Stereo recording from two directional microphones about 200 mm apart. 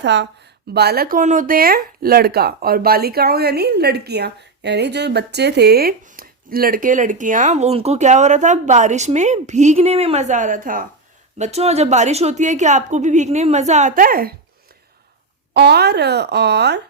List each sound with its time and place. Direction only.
0.0 s speech: 60° right (ahead or behind); by 10.8 s 45° right (ahead or behind)
11.3 s a woman's voice: 35° right (ahead or behind)
15.5 s speech: 55° right (ahead or behind)